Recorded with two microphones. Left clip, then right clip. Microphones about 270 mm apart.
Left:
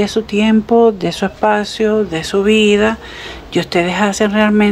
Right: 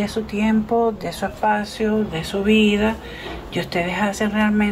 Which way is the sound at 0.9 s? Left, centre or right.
Left.